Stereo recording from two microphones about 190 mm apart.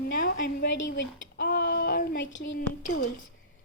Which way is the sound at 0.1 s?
55° left (ahead or behind).